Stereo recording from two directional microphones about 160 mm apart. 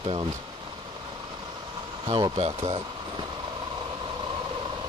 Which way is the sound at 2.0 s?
30° right (ahead or behind).